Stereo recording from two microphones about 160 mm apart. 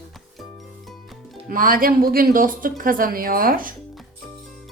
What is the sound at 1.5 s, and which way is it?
A woman's voice, 60° right (ahead or behind).